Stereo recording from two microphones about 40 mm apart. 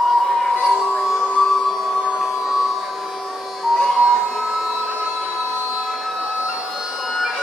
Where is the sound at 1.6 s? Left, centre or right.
Centre.